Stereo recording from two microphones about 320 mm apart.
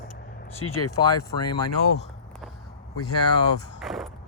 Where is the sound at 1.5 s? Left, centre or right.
Centre.